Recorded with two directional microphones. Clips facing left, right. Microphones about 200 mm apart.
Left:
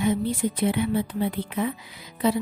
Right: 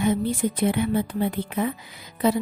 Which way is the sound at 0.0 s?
50° right (ahead or behind).